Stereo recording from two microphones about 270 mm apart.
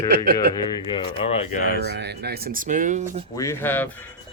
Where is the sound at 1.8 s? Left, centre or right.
Right.